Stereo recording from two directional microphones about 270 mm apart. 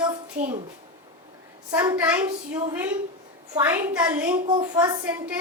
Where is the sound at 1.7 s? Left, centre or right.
Centre.